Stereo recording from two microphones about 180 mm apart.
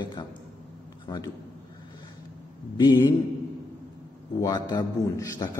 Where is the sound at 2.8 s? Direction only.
25° left (ahead or behind).